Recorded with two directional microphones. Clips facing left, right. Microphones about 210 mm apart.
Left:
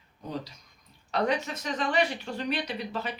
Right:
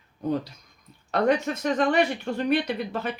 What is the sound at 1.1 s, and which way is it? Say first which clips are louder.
Speech: right 5 dB; 50° right (ahead or behind).